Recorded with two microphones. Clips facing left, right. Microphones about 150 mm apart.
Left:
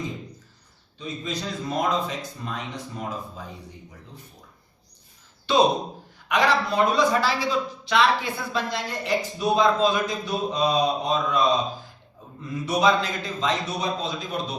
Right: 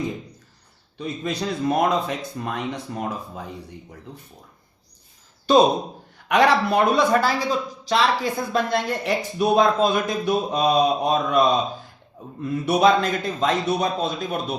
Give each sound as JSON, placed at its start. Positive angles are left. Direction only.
{"t": 0.9, "sound": "a man's voice", "side_deg": -65}
{"t": 6.2, "sound": "a man's voice", "side_deg": -60}
{"t": 7.9, "sound": "a woman's voice", "side_deg": -40}
{"t": 8.7, "sound": "a man's voice", "side_deg": -60}